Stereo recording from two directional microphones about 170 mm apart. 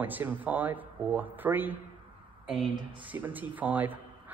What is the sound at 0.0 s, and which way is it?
Speech, 10° right (ahead or behind).